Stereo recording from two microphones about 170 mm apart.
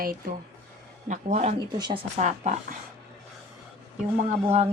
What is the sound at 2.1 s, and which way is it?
Speech, 40° right (ahead or behind).